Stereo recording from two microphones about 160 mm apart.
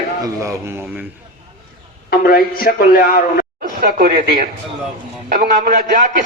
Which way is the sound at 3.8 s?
70° right (ahead or behind).